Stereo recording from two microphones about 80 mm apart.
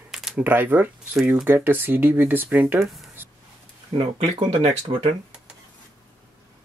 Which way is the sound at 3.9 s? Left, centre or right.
Right.